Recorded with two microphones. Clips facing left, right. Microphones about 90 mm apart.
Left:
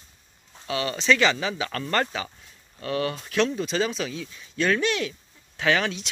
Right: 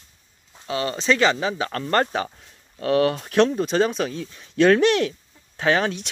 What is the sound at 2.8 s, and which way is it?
Speech, 55° right (ahead or behind).